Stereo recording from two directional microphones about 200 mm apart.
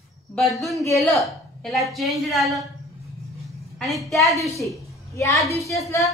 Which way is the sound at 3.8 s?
Centre (ahead or behind).